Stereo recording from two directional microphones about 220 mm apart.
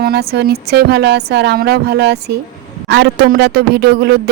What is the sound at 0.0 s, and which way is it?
A man's voice, 45° right (ahead or behind).